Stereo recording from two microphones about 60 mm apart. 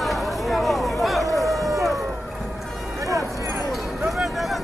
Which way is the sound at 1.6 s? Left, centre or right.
Right.